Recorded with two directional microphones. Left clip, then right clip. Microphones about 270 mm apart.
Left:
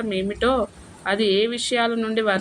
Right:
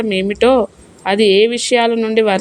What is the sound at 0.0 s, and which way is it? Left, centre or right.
A woman's voice, right.